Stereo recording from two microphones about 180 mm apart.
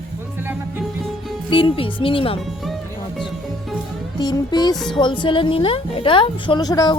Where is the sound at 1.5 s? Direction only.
30° left (ahead or behind).